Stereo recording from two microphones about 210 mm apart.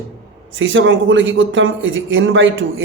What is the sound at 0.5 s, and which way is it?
A man's voice, 65° right (ahead or behind).